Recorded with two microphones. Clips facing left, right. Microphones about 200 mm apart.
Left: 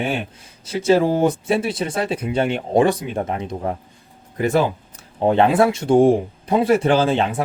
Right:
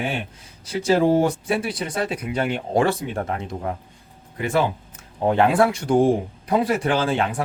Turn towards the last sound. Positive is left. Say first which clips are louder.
# left 4 dB
turn(degrees=25)  # may be behind; listen again after turning